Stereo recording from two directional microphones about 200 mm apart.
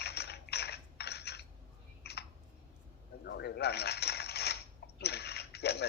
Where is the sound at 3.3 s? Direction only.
55° left (ahead or behind).